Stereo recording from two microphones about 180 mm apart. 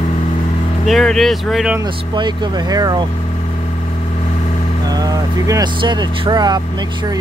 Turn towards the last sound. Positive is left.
turn(degrees=-25)  # may be behind; listen again after turning